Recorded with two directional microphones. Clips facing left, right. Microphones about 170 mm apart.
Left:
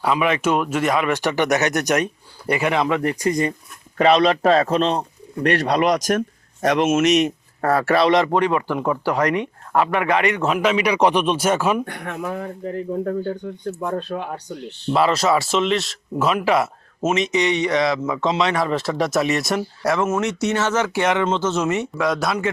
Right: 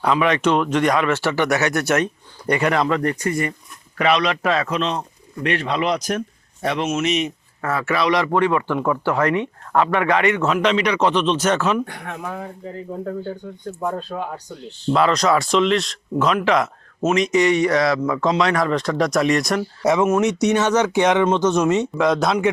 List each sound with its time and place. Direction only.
0.0 s speech: 5° left (ahead or behind)
2.5 s speech: 5° left (ahead or behind); by 7.0 s 50° left (ahead or behind)
7.0 s speech: 80° left
7.3 s speech: 40° left (ahead or behind); by 10.3 s 20° left (ahead or behind)
10.4 s speech: 10° left (ahead or behind)
11.9 s speech: 60° left (ahead or behind)
14.9 s speech: 5° left (ahead or behind)
17.5 s speech: 20° left (ahead or behind)
18.7 s speech: 5° left (ahead or behind)
19.8 s speech: 20° right (ahead or behind)
21.9 s speech: centre (ahead or behind)